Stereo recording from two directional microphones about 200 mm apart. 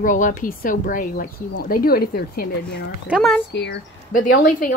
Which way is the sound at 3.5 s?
60° left (ahead or behind).